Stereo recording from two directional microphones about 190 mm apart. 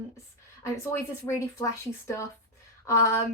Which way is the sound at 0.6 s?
15° left (ahead or behind).